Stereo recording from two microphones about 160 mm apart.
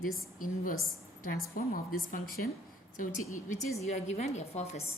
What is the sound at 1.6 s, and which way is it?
Speech, 60° left (ahead or behind).